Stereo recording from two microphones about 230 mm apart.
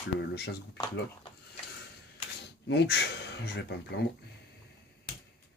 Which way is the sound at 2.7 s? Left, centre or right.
Left.